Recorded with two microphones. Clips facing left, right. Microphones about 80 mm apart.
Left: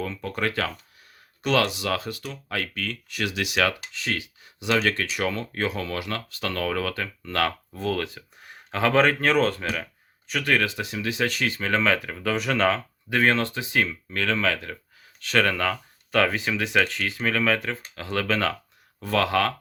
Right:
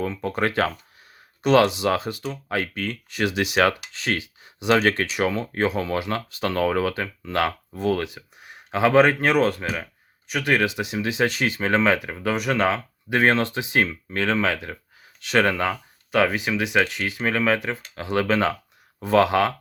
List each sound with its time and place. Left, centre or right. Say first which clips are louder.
0.0 s speech: right 4 dB; right
5.1 s speech: right 4 dB; centre
13.1 s speech: right 2 dB; right